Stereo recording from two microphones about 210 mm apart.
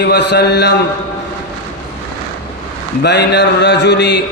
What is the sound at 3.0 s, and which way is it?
Mantra, 55° left (ahead or behind).